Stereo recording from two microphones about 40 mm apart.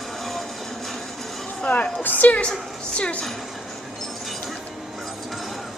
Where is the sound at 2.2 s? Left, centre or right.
Left.